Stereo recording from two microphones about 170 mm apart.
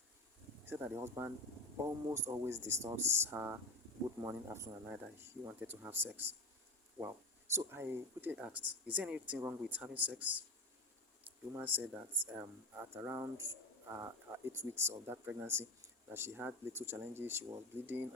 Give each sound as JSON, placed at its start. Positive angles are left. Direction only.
{"t": 0.6, "sound": "speech", "side_deg": -10}
{"t": 11.5, "sound": "speech", "side_deg": -10}